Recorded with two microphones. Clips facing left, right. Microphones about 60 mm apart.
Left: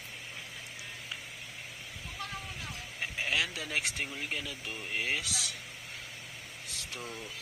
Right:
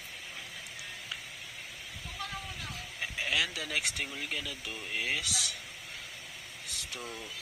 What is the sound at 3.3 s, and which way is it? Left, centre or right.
Speech, left.